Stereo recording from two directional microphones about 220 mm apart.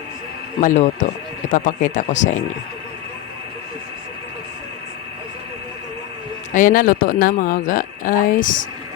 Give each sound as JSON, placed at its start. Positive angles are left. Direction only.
{"t": 0.6, "sound": "speech", "side_deg": 35}
{"t": 6.5, "sound": "speech", "side_deg": 35}